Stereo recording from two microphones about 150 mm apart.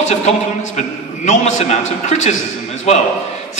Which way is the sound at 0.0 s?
50° left (ahead or behind).